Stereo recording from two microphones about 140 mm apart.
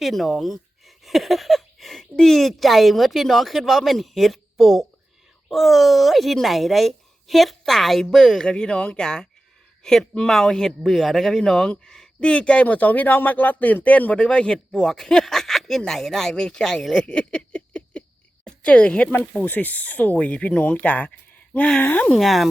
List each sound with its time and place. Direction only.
0.0 s a man's voice: centre (ahead or behind)
22.2 s a man's voice: centre (ahead or behind)